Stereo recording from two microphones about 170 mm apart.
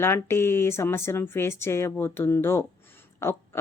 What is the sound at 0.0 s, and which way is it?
Speech, 15° left (ahead or behind).